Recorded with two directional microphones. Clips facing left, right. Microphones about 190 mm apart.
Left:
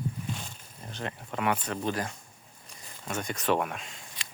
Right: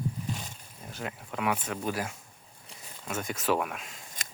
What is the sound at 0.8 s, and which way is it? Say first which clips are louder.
Speech: left 1 dB; 5° right (ahead or behind).